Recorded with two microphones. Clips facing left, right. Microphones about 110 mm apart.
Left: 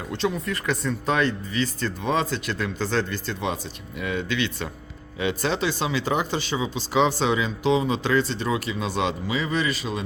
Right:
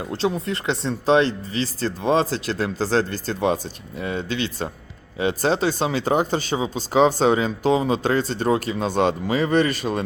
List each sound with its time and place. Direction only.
0.1 s speech: 30° right (ahead or behind); by 10.0 s 50° right (ahead or behind)